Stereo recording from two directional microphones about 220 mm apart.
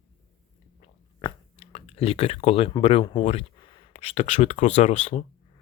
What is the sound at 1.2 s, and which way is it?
Speech, 25° left (ahead or behind).